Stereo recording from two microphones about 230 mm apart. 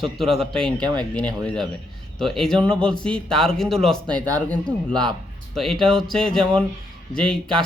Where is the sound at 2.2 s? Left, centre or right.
Centre.